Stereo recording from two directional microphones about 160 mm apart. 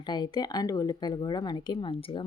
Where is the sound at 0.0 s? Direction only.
25° left (ahead or behind).